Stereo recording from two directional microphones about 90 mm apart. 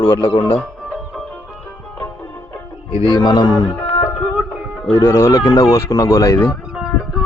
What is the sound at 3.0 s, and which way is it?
Speech, 55° left (ahead or behind).